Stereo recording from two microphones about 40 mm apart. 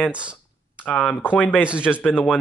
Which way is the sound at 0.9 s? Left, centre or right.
Centre.